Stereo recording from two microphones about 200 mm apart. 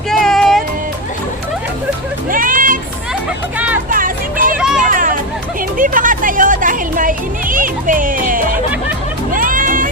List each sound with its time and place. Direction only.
0.1 s music: centre (ahead or behind)
2.3 s music: 40° right (ahead or behind)
3.8 s music: 45° right (ahead or behind)
4.5 s music: 5° right (ahead or behind)
4.8 s hubbub: 40° right (ahead or behind)
5.7 s music: 40° right (ahead or behind)